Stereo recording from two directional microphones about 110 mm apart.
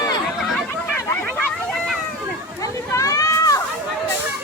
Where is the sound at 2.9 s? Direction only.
30° left (ahead or behind).